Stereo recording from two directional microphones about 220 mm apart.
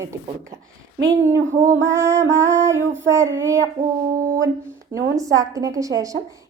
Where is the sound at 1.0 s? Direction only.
10° right (ahead or behind).